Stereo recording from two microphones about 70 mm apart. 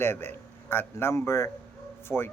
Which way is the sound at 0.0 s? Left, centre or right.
Left.